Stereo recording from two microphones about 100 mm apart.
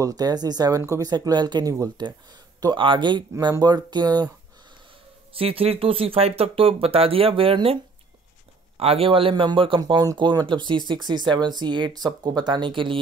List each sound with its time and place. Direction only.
0.0 s speech: 40° right (ahead or behind)
1.1 s speech: 45° right (ahead or behind)
2.6 s speech: 55° right (ahead or behind)
5.3 s speech: 70° right (ahead or behind)
8.7 s a man's voice: 75° right (ahead or behind); by 9.8 s 60° right (ahead or behind)
9.8 s speech: 45° right (ahead or behind)